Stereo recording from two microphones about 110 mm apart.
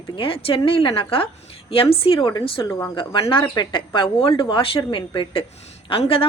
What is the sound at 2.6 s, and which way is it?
Speech, 25° left (ahead or behind).